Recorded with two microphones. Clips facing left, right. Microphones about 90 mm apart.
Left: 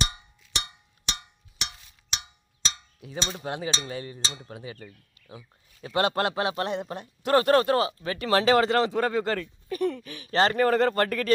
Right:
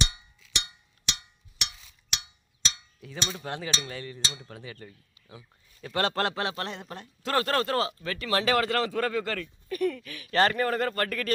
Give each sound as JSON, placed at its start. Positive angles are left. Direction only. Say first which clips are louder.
{"t": 0.0, "sound": "cowbell", "louder": "left 1 dB", "side_deg": 35}
{"t": 3.0, "sound": "speech", "louder": "left 2 dB", "side_deg": 25}
{"t": 3.4, "sound": "speech", "louder": "left 3 dB", "side_deg": 15}
{"t": 4.2, "sound": "speech", "louder": "left 1 dB", "side_deg": 30}
{"t": 4.4, "sound": "speech", "louder": "left 3 dB", "side_deg": 15}
{"t": 8.3, "sound": "speech", "louder": "left 5 dB", "side_deg": 30}